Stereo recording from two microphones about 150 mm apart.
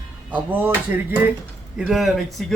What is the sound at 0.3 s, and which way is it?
Speech, 10° right (ahead or behind).